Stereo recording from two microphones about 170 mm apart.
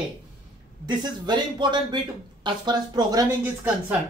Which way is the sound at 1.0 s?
25° right (ahead or behind).